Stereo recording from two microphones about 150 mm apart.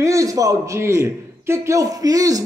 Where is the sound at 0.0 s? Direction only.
20° right (ahead or behind).